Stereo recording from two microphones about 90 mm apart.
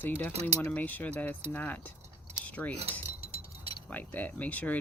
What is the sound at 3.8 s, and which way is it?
Speech, 20° left (ahead or behind).